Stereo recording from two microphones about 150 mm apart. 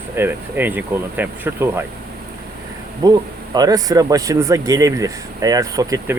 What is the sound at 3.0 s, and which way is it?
Speech, 25° right (ahead or behind).